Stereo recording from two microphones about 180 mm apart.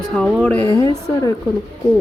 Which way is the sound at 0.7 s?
25° left (ahead or behind).